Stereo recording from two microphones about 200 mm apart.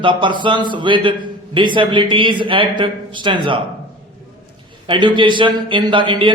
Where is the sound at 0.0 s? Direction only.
25° right (ahead or behind).